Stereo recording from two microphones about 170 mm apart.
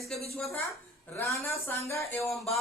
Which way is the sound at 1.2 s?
15° left (ahead or behind).